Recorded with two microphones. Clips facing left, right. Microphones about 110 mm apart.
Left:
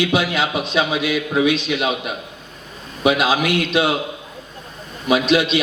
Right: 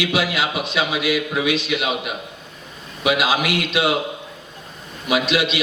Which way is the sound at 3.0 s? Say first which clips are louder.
Left 3 dB; 30° left (ahead or behind).